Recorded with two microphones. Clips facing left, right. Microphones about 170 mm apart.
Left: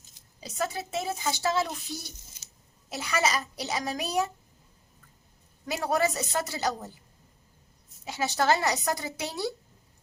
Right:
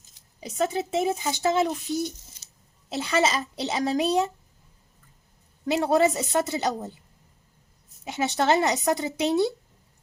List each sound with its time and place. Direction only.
0.3 s speech: 20° right (ahead or behind)
5.6 s speech: 30° right (ahead or behind)
8.0 s speech: 25° right (ahead or behind)